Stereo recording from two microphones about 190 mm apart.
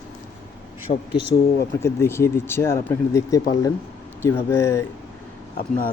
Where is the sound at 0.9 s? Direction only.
55° left (ahead or behind).